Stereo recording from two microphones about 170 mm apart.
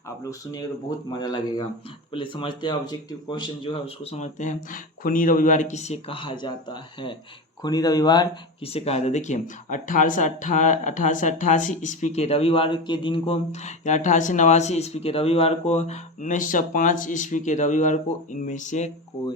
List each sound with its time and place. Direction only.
0.3 s speech: 20° left (ahead or behind)
8.7 s speech: 40° left (ahead or behind)